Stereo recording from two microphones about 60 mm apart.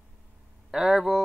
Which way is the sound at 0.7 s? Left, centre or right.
Centre.